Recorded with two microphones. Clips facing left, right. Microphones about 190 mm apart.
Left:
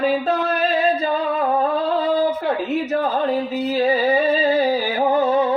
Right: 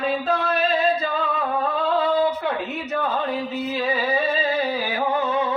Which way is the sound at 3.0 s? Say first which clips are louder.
Left 5 dB; 35° left (ahead or behind).